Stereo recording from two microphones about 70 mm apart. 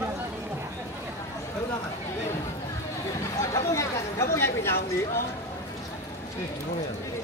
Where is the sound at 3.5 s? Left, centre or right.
Left.